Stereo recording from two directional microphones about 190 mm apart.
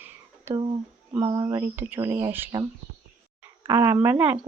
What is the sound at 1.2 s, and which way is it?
Speech, 20° right (ahead or behind).